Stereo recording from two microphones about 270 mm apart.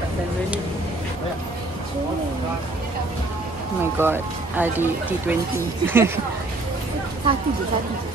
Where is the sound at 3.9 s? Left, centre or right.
Centre.